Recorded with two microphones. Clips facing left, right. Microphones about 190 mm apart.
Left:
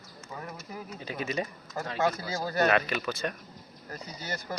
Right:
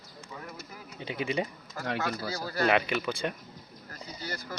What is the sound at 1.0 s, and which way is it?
Speech, 20° right (ahead or behind).